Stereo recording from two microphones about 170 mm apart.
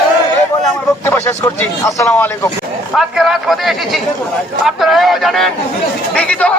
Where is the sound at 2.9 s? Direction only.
Centre (ahead or behind).